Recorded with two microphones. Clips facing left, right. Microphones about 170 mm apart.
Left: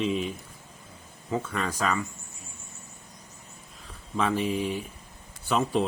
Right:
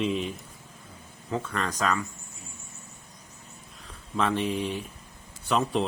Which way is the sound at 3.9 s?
Centre (ahead or behind).